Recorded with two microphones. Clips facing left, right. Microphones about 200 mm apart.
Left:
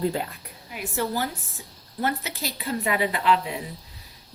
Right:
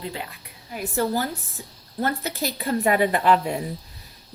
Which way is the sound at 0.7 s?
40° right (ahead or behind).